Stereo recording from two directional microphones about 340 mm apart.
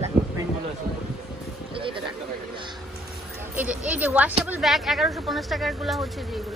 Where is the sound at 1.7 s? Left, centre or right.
Centre.